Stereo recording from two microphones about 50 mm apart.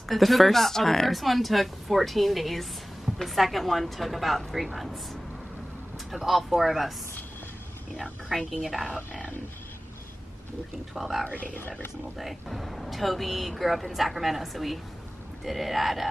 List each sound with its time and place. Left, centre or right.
0.1 s speech: centre
6.1 s speech: centre
8.0 s speech: centre
11.0 s speech: centre
11.2 s speech: left
12.2 s speech: centre